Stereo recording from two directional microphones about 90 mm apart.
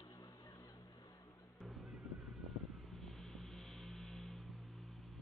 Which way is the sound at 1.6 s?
Centre (ahead or behind).